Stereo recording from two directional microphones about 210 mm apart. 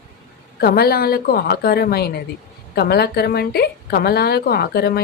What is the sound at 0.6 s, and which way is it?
A woman's voice, 45° left (ahead or behind).